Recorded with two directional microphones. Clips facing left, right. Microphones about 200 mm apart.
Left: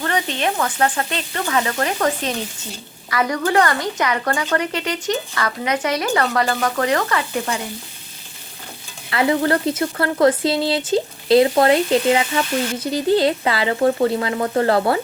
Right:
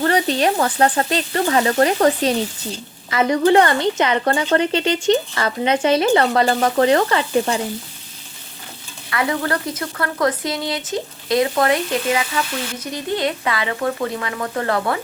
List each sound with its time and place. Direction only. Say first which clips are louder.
0.0 s frying: right 5 dB; 35° right (ahead or behind)
3.1 s a woman's voice: right 5 dB; 25° right (ahead or behind)
9.0 s speech: left 4 dB; 25° left (ahead or behind)